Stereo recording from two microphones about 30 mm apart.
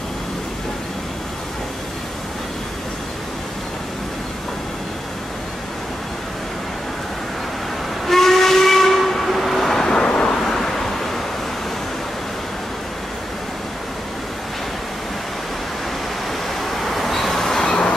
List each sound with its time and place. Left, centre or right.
8.1 s steam whistle: centre
9.8 s vehicle: left
10.2 s vehicle: centre
16.7 s vehicle: centre
17.6 s a sound: left